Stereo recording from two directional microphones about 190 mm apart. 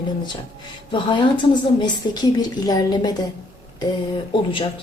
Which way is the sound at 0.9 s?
25° left (ahead or behind).